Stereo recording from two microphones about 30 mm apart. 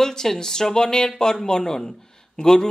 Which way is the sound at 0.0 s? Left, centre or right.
Centre.